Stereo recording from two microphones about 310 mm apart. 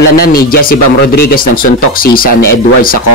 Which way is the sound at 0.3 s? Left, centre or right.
Left.